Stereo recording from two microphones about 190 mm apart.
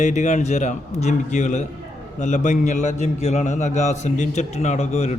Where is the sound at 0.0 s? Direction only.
40° left (ahead or behind).